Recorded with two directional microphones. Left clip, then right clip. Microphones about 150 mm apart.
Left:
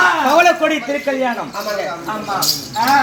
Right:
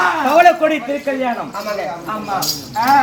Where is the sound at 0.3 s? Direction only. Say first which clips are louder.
Right 1 dB; 20° right (ahead or behind).